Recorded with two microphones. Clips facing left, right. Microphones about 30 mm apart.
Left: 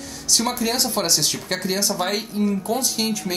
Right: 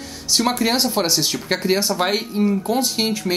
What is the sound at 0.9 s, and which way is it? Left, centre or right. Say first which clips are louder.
Speech: right 2 dB; centre.